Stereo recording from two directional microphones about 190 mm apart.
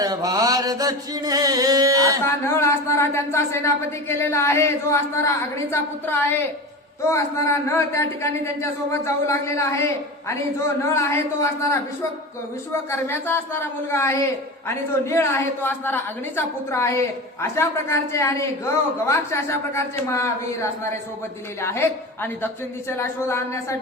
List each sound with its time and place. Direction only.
0.0 s chant: 20° right (ahead or behind)
2.2 s a woman's voice: 15° left (ahead or behind)
12.9 s a woman's voice: 10° left (ahead or behind)